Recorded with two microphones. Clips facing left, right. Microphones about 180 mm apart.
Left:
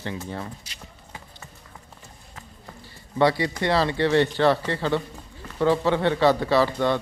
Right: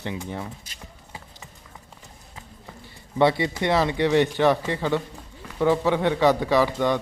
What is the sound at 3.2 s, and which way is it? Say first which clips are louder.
Speech: right 1 dB; 20° right (ahead or behind).